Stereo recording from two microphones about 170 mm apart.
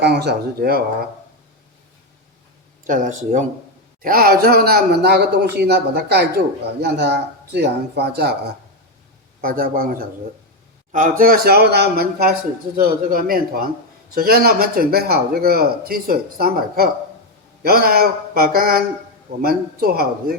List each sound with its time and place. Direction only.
0.0 s a man's voice: 80° right
2.8 s speech: 50° right (ahead or behind)
4.0 s a man's voice: 60° right (ahead or behind)
9.4 s speech: 55° right (ahead or behind)
11.2 s a man's voice: 60° right (ahead or behind)
12.7 s speech: 55° right (ahead or behind)